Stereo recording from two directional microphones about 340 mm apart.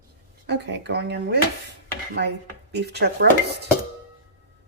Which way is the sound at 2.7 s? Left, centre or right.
Right.